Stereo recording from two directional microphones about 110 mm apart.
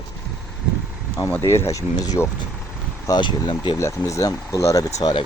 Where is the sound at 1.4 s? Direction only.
25° left (ahead or behind).